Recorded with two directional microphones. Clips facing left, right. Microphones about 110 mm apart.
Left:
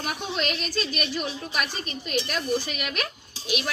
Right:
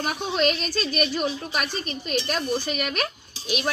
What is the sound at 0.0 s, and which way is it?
Speech, 40° right (ahead or behind).